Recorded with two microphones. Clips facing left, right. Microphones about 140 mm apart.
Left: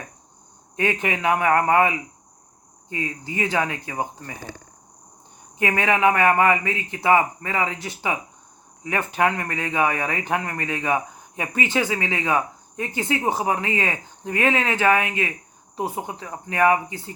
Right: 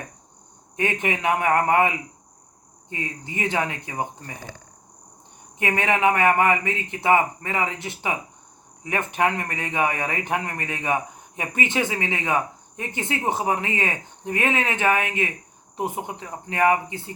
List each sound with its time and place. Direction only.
0.8 s speech: 25° right (ahead or behind)
2.9 s speech: 25° right (ahead or behind)
5.5 s speech: 20° right (ahead or behind)